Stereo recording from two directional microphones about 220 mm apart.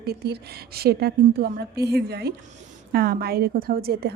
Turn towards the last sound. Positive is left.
turn(degrees=-45)  # may be behind; listen again after turning